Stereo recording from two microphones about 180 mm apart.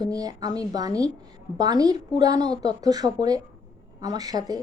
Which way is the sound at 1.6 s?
20° right (ahead or behind).